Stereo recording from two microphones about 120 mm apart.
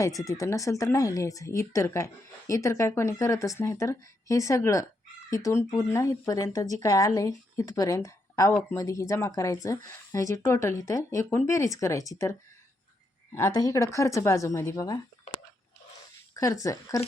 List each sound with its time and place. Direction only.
0.0 s speech: 25° left (ahead or behind)
16.3 s speech: 30° left (ahead or behind)